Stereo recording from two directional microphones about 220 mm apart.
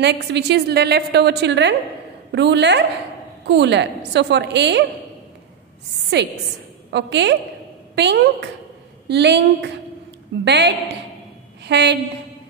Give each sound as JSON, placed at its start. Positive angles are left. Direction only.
{"t": 0.0, "sound": "a woman's voice", "side_deg": -50}
{"t": 6.1, "sound": "a woman's voice", "side_deg": -50}